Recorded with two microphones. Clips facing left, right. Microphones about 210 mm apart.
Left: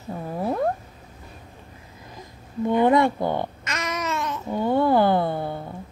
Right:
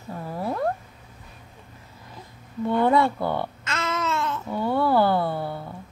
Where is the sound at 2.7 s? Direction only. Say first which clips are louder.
Left 2 dB; 15° left (ahead or behind).